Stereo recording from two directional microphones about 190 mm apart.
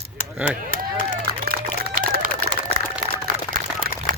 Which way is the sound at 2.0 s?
50° right (ahead or behind).